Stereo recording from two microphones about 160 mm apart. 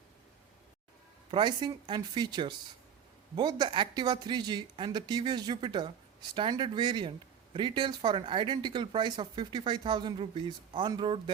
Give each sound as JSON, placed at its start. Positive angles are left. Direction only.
{"t": 1.3, "sound": "speech", "side_deg": -30}